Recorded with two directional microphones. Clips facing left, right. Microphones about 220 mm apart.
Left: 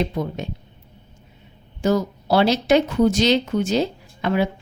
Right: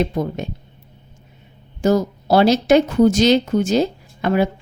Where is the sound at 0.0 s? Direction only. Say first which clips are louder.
Right 3 dB; 45° right (ahead or behind).